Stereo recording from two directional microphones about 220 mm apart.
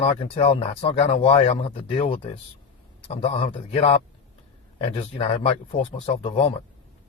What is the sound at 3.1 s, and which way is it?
Speech, 30° left (ahead or behind).